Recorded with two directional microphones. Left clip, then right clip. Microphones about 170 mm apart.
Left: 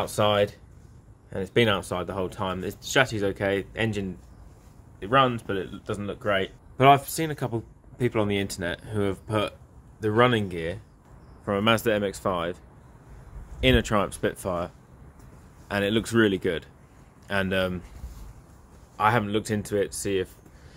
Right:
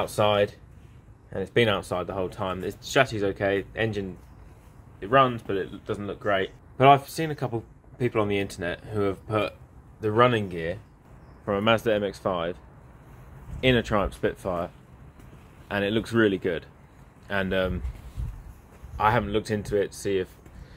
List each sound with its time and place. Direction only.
0.1 s speech: 35° left (ahead or behind)
13.6 s speech: 35° left (ahead or behind)
15.7 s speech: 35° left (ahead or behind)
18.9 s speech: 30° left (ahead or behind)